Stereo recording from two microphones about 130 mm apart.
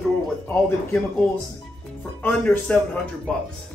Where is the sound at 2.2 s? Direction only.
10° left (ahead or behind).